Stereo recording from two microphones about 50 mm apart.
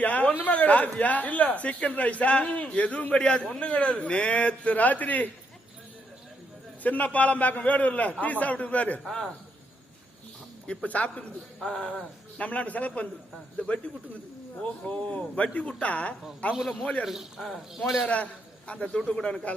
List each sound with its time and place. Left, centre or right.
0.0 s a sound: left
0.4 s speech: left
6.8 s a man's voice: left
9.0 s a man's voice: centre
10.7 s speech: left
11.6 s speech: centre
16.8 s a man's voice: centre
17.1 s speech: centre
18.0 s speech: left